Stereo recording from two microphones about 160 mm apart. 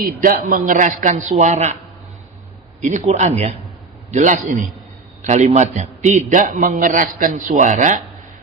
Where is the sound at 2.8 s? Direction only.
50° right (ahead or behind).